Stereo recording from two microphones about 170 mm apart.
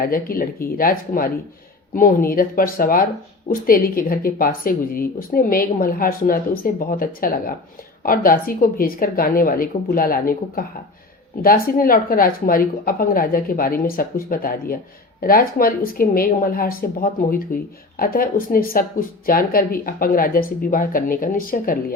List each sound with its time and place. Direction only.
0.0 s speech: 60° left (ahead or behind)